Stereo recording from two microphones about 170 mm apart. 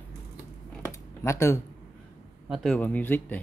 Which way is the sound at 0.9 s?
15° left (ahead or behind).